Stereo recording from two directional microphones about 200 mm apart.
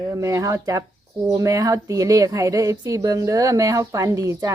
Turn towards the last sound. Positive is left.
turn(degrees=-15)  # may be behind; listen again after turning